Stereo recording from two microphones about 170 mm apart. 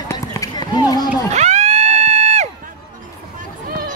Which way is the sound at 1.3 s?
40° right (ahead or behind).